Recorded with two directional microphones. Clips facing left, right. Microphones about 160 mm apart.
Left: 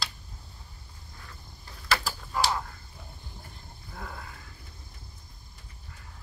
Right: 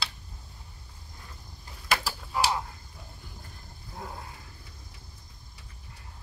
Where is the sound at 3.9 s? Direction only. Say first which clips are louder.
Right 1 dB; 25° right (ahead or behind).